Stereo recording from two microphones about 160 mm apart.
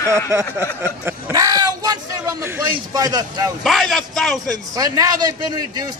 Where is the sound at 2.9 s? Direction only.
25° right (ahead or behind).